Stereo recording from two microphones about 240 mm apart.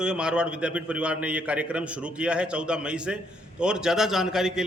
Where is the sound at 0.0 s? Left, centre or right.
Centre.